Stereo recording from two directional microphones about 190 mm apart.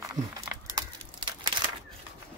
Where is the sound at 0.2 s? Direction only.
40° right (ahead or behind).